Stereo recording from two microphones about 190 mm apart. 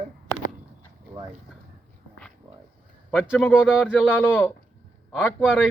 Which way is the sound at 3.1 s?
10° left (ahead or behind).